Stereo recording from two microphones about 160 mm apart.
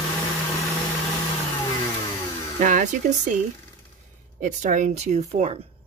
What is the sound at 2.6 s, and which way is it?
Speech, 55° right (ahead or behind).